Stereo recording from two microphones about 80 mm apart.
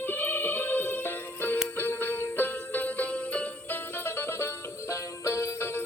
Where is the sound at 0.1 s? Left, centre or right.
Left.